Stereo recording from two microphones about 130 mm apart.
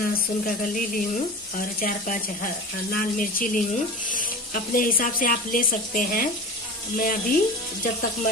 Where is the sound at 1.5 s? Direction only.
90° left.